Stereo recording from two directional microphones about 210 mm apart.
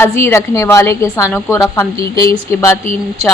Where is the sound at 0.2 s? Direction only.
15° left (ahead or behind).